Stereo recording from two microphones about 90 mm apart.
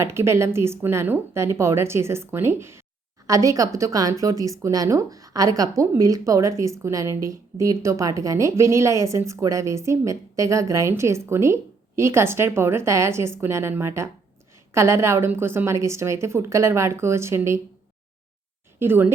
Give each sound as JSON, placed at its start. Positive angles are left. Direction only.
{"t": 0.0, "sound": "a woman's voice", "side_deg": -30}
{"t": 3.2, "sound": "a woman's voice", "side_deg": -40}
{"t": 18.8, "sound": "a woman's voice", "side_deg": -25}